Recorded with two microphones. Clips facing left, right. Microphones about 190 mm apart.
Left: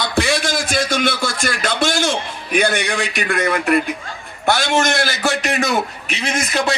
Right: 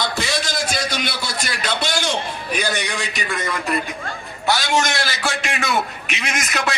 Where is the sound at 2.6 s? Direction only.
55° left (ahead or behind).